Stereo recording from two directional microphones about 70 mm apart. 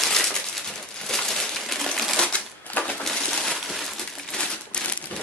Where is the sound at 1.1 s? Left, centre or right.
Centre.